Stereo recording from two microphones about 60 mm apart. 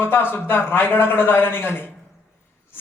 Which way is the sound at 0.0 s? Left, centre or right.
Left.